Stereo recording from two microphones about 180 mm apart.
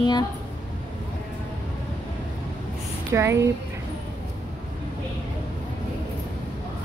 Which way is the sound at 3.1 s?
15° right (ahead or behind).